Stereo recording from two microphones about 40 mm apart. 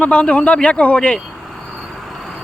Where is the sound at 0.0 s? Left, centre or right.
Left.